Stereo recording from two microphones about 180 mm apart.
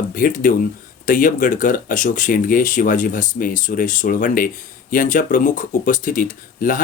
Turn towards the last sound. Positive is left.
turn(degrees=50)  # may be behind; listen again after turning